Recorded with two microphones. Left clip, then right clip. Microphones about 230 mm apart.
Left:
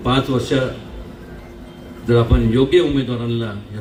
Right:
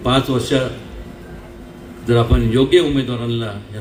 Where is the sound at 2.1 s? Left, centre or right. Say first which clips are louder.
Even; right.